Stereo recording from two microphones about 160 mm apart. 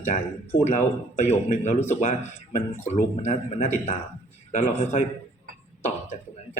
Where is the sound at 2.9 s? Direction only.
50° left (ahead or behind).